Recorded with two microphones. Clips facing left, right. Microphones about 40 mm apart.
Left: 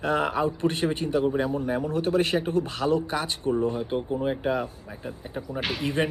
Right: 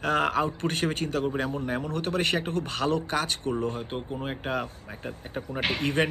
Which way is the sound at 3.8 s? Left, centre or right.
Centre.